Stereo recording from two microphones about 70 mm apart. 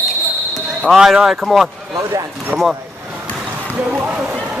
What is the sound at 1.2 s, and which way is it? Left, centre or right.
Speech, centre.